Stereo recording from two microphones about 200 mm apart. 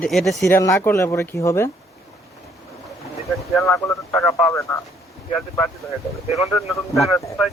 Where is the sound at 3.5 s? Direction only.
15° left (ahead or behind).